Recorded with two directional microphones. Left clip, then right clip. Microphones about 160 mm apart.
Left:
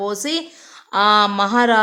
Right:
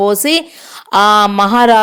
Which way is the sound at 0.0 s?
40° right (ahead or behind).